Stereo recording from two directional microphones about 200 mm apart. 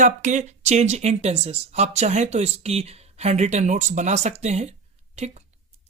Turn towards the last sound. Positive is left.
turn(degrees=-35)  # may be behind; listen again after turning